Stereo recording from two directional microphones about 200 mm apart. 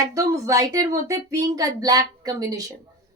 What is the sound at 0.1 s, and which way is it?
A woman's voice, 15° right (ahead or behind).